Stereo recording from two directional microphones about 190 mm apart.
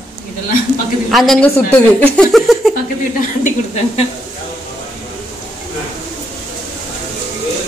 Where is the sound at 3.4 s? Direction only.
35° left (ahead or behind).